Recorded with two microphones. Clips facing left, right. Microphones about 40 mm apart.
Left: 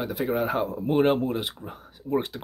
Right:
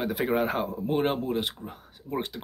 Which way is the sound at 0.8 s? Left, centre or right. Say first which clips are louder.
Left 5 dB; centre.